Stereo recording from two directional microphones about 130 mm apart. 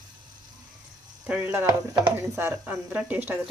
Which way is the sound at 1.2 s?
10° right (ahead or behind).